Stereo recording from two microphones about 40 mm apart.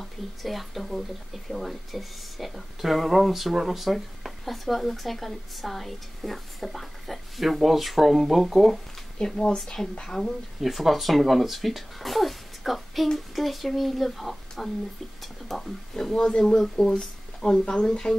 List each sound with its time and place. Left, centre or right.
0.0 s speech: centre
9.2 s speech: left
10.6 s speech: centre